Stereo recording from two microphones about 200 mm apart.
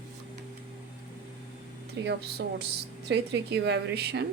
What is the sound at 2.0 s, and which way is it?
A woman's voice, 55° right (ahead or behind).